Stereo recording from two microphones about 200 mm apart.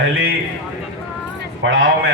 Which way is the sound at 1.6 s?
65° right (ahead or behind).